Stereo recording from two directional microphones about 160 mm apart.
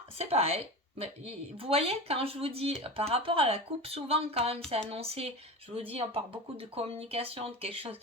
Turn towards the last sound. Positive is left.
turn(degrees=-35)  # may be behind; listen again after turning